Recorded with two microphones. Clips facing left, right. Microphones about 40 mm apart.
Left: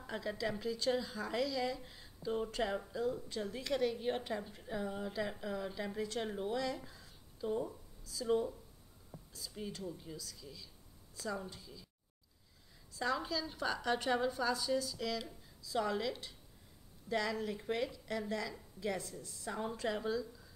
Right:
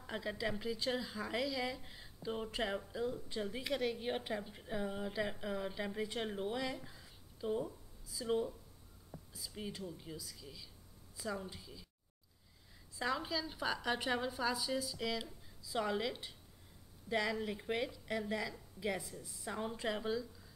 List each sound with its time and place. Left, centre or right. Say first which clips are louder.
0.0 s speech: left 1 dB; centre
12.9 s speech: left 1 dB; centre